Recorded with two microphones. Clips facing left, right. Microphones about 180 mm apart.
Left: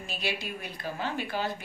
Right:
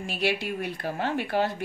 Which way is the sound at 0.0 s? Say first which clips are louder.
Right 7 dB; 70° right (ahead or behind).